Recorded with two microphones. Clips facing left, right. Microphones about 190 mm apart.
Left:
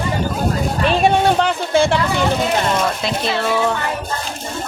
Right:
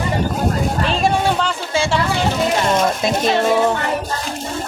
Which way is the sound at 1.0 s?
60° left (ahead or behind).